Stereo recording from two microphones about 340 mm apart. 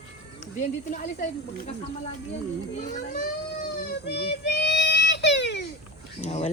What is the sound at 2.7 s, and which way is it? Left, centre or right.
Speech, left.